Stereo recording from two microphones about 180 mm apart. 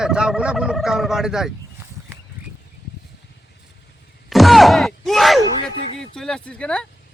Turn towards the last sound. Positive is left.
turn(degrees=5)  # may be behind; listen again after turning